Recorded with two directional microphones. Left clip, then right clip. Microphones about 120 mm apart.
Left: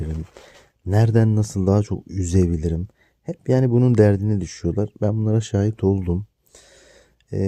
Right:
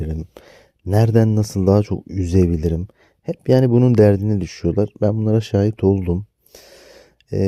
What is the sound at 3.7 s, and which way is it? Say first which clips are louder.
Speech: right 3 dB; 20° right (ahead or behind).